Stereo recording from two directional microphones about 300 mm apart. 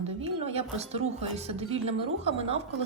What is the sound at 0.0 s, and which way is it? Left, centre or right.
A woman's voice, right.